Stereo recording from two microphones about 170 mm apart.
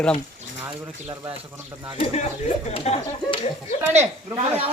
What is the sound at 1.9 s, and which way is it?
Speech, 35° left (ahead or behind).